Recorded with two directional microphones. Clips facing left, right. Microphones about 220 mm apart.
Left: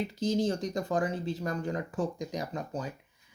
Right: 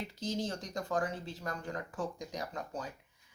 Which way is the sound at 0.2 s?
15° left (ahead or behind).